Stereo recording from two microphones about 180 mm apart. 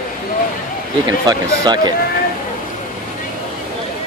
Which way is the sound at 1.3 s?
20° right (ahead or behind).